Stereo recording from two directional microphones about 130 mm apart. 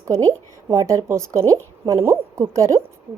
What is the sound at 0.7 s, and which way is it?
A woman's voice, 25° right (ahead or behind).